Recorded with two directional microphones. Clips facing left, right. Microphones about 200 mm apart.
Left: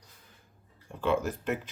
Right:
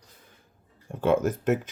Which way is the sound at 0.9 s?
50° right (ahead or behind).